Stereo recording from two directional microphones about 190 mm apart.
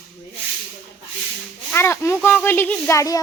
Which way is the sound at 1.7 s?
15° left (ahead or behind).